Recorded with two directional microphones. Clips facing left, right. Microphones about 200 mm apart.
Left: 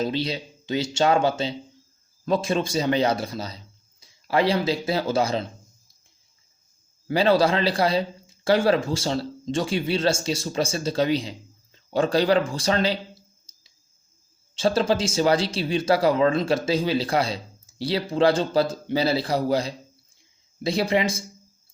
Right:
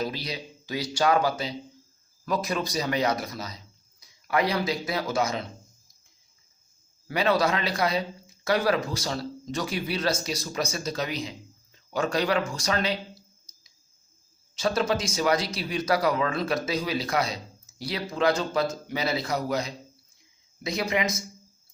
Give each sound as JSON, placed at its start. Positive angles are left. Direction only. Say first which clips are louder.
{"t": 0.0, "sound": "speech", "louder": "left 6 dB", "side_deg": 25}
{"t": 7.1, "sound": "a man's voice", "louder": "left 5 dB", "side_deg": 30}